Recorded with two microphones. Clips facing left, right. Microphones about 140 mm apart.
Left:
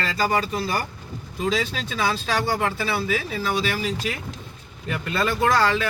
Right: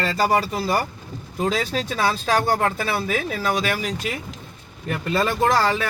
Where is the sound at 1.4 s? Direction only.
50° right (ahead or behind).